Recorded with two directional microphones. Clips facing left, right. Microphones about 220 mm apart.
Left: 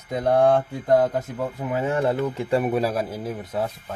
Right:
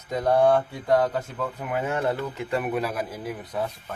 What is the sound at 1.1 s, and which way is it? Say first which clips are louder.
Speech: left 3 dB; 20° left (ahead or behind).